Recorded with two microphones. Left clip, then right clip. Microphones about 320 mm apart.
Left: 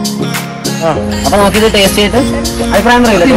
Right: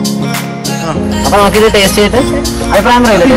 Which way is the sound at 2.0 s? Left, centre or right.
Centre.